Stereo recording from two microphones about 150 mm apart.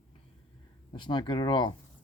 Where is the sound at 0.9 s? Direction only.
30° left (ahead or behind).